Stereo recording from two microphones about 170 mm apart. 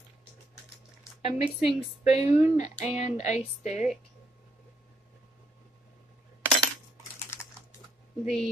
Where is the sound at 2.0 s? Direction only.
40° left (ahead or behind).